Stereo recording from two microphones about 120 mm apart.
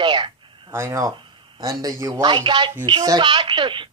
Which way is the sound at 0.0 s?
40° right (ahead or behind).